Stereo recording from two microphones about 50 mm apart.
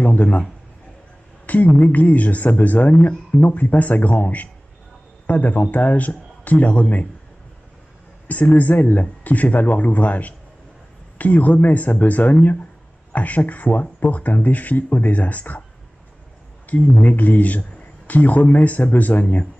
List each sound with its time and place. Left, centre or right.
0.0 s a man's voice: left
1.4 s a sound: left
1.7 s speech: left
8.3 s speech: left
16.6 s speech: left